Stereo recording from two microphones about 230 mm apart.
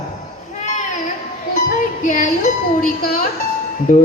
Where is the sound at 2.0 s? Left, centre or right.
Left.